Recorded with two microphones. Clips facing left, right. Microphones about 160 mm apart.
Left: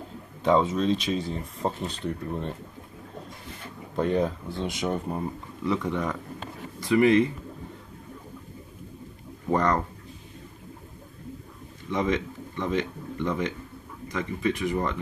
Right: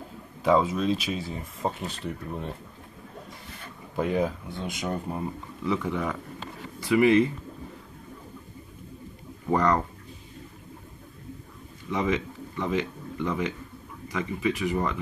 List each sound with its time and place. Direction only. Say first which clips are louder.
0.4 s speech: even; 5° right (ahead or behind)
3.9 s speech: left 1 dB; 5° right (ahead or behind)
9.5 s speech: right 1 dB; centre (ahead or behind)
11.9 s speech: left 1 dB; 5° right (ahead or behind)